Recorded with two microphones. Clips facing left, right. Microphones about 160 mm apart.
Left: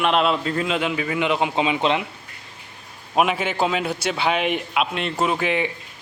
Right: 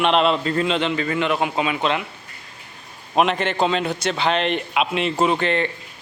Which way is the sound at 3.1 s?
5° left (ahead or behind).